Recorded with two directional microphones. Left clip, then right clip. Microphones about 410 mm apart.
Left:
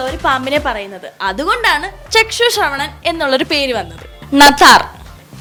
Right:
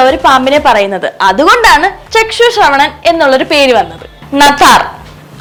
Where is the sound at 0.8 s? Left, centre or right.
Centre.